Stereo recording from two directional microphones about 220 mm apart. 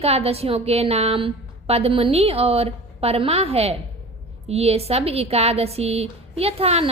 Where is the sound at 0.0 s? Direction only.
25° right (ahead or behind).